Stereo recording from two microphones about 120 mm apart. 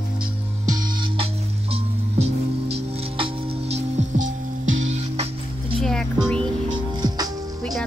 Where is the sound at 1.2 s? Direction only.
55° right (ahead or behind).